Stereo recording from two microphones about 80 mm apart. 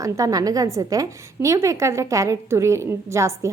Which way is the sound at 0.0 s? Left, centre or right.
Right.